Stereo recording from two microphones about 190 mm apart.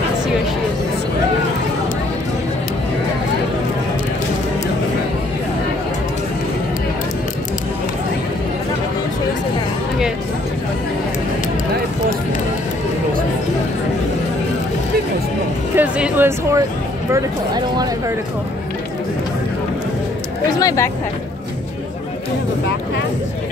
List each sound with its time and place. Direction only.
15.7 s music: 10° right (ahead or behind)
17.1 s a sound: 20° right (ahead or behind)
20.5 s speech: 15° left (ahead or behind)